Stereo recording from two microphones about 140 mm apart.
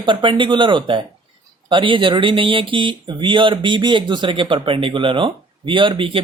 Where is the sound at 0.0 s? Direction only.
35° right (ahead or behind).